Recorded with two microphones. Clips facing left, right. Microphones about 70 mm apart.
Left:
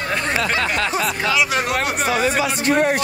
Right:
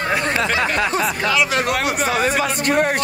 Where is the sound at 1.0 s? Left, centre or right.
Centre.